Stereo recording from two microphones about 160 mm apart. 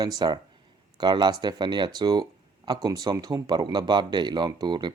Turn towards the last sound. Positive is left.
turn(degrees=-30)  # may be behind; listen again after turning